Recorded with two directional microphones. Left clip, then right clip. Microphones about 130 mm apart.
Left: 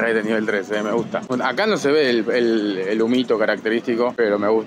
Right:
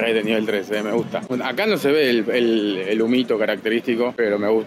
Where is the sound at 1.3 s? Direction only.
Centre (ahead or behind).